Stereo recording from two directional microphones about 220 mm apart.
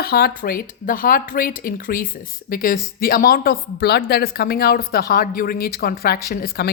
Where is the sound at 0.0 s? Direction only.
45° left (ahead or behind).